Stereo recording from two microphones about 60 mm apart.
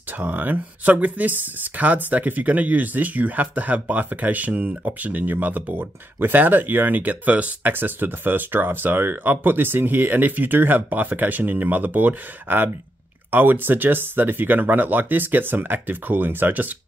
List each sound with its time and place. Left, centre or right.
0.2 s speech: right